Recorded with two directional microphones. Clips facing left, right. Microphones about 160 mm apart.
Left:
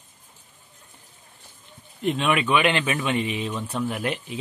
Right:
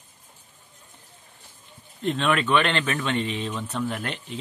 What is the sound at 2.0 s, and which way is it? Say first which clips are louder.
A man's voice: left 1 dB; 5° left (ahead or behind).